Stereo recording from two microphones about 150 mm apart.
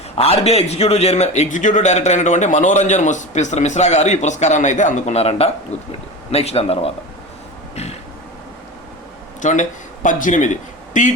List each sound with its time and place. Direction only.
0.2 s a man's voice: 40° left (ahead or behind)
9.4 s speech: 55° left (ahead or behind)